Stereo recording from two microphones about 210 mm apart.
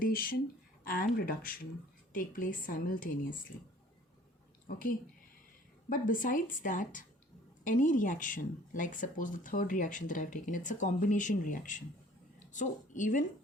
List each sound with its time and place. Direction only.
0.0 s speech: 45° left (ahead or behind)
4.6 s a woman's voice: 40° left (ahead or behind)